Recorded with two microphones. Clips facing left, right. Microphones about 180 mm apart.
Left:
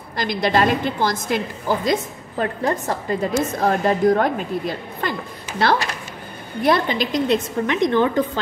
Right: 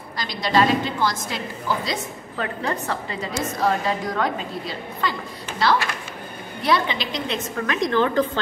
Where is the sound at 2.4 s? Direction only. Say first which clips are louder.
Left 5 dB; 40° left (ahead or behind).